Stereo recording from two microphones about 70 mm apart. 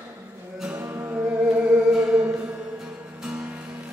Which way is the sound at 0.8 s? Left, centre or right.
Right.